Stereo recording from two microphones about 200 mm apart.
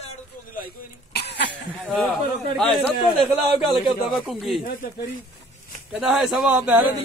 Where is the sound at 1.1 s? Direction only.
55° left (ahead or behind).